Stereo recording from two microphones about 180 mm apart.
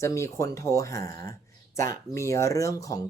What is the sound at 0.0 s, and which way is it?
Speech, 15° left (ahead or behind).